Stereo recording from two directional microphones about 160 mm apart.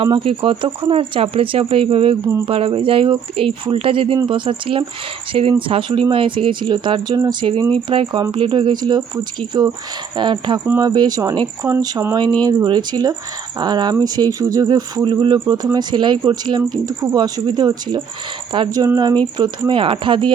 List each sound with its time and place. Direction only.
0.0 s speech: 35° right (ahead or behind)